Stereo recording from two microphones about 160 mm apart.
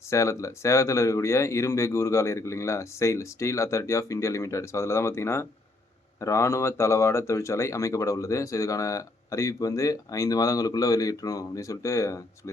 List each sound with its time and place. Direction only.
0.1 s speech: 20° left (ahead or behind)